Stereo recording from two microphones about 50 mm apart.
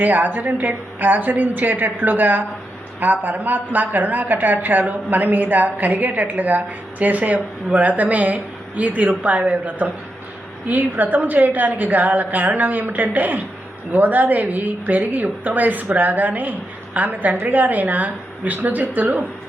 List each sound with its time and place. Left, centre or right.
0.0 s a woman's voice: right